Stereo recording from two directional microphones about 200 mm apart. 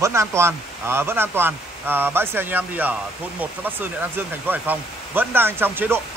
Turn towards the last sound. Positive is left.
turn(degrees=-10)  # may be behind; listen again after turning